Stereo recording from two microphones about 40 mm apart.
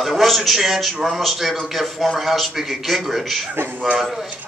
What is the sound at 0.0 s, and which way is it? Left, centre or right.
Speech, centre.